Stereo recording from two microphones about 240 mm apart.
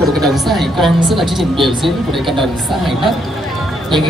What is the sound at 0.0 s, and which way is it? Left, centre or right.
A woman's voice, centre.